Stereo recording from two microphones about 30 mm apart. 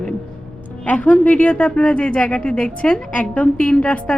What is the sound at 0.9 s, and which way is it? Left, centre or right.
Speech, left.